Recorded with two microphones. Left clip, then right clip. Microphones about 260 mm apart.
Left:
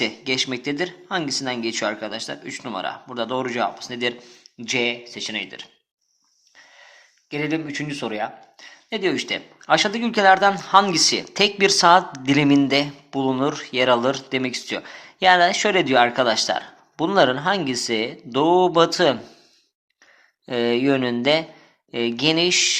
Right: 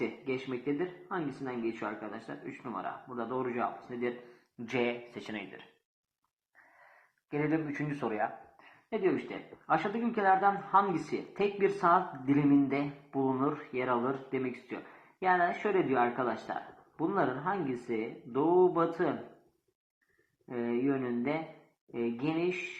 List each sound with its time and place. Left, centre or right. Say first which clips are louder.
0.3 s speech: left 11 dB; left
4.7 s speech: left 10 dB; left
7.3 s speech: left 7 dB; left
8.9 s speech: left 9 dB; left
20.5 s speech: left 13 dB; left